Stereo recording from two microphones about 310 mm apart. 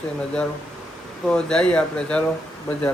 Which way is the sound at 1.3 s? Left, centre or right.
Centre.